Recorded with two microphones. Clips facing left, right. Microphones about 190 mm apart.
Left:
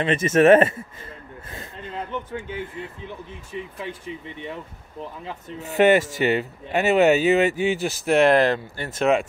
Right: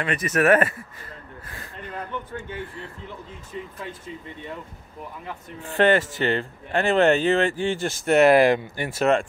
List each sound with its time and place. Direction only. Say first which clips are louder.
0.0 s speech: left 5 dB; 25° left (ahead or behind)
1.5 s a sound: left 2 dB; 20° left (ahead or behind)
2.5 s speech: left 3 dB; 20° left (ahead or behind)
5.6 s speech: left 2 dB; 10° left (ahead or behind); by 9.0 s 15° right (ahead or behind)